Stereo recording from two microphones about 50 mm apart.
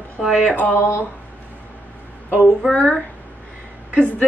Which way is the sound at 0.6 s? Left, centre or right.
Left.